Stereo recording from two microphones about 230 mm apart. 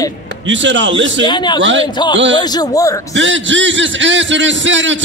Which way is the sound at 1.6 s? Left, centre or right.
Right.